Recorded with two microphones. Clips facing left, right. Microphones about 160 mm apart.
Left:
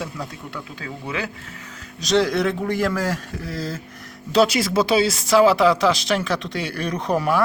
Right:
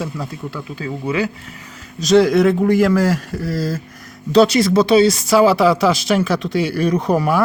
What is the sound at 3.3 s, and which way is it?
Speech, 90° right.